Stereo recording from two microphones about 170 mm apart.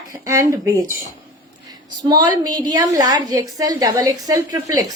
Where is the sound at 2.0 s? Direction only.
25° right (ahead or behind).